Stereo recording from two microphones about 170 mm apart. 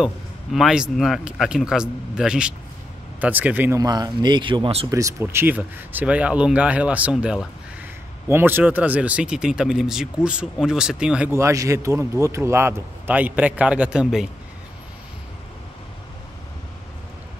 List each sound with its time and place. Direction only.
0.0 s speech: centre (ahead or behind)
3.8 s speech: 25° right (ahead or behind)
4.9 s speech: 15° right (ahead or behind)